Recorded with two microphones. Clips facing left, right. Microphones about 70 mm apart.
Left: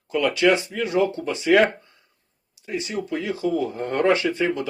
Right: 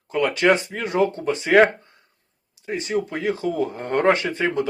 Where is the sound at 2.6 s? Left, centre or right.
Right.